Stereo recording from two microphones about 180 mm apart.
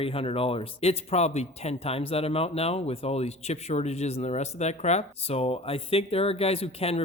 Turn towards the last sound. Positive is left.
turn(degrees=35)  # may be behind; listen again after turning